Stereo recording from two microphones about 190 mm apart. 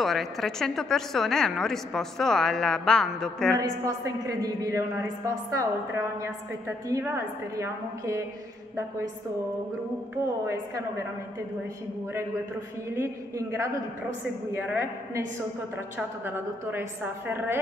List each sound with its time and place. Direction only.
0.0 s a woman's voice: centre (ahead or behind)
3.5 s a woman's voice: 15° right (ahead or behind)
12.9 s a woman's voice: 15° right (ahead or behind)